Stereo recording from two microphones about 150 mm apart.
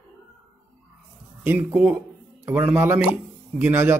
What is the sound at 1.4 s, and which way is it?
Speech, 15° right (ahead or behind).